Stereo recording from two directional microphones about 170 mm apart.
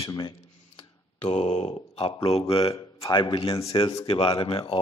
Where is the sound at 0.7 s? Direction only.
35° left (ahead or behind).